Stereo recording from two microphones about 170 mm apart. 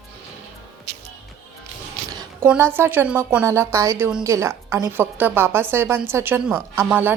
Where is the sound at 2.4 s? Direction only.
15° right (ahead or behind).